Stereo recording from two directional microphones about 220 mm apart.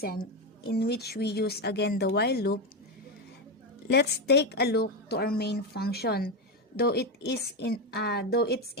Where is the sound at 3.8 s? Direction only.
50° left (ahead or behind).